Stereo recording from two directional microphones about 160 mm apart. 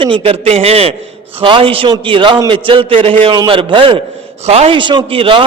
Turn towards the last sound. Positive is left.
turn(degrees=-35)  # may be behind; listen again after turning